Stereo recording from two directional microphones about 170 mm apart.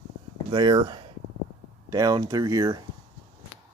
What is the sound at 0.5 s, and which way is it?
Speech, 25° right (ahead or behind).